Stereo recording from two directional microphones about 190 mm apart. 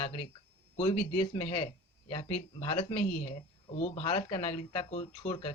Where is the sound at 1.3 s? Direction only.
30° left (ahead or behind).